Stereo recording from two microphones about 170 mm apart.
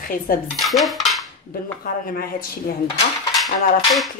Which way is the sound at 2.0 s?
60° left (ahead or behind).